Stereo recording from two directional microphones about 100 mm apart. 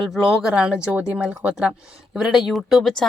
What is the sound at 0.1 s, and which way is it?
A woman's voice, 5° right (ahead or behind).